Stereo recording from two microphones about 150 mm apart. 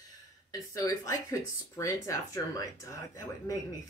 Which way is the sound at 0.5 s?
25° left (ahead or behind).